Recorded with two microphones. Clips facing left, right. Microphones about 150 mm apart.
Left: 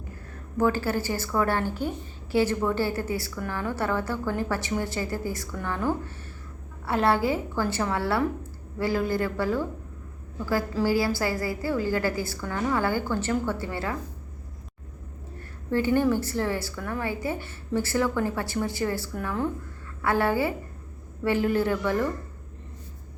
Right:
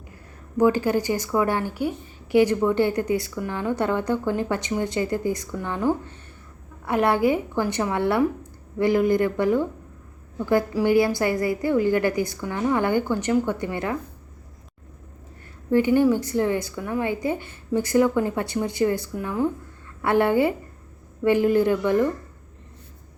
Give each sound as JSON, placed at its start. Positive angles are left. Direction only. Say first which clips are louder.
{"t": 0.5, "sound": "a woman's voice", "louder": "right 5 dB", "side_deg": -15}
{"t": 15.7, "sound": "a woman's voice", "louder": "right 4 dB", "side_deg": -15}